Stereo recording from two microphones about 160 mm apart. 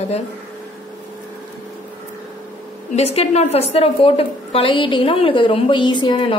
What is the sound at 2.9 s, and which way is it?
A woman's voice, 40° left (ahead or behind).